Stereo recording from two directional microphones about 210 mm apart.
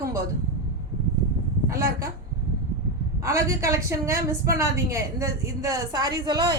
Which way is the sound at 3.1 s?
15° right (ahead or behind).